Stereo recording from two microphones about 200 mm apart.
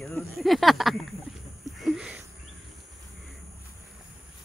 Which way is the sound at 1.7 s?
Centre (ahead or behind).